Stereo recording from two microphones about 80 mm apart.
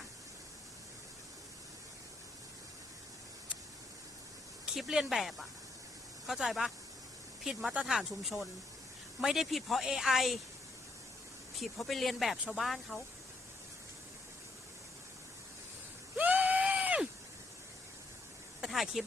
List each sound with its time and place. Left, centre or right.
4.6 s speech: centre
11.5 s speech: centre
16.1 s screaming: right
18.6 s a sound: centre